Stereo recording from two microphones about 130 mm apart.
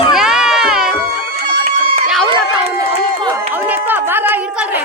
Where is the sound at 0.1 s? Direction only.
5° right (ahead or behind).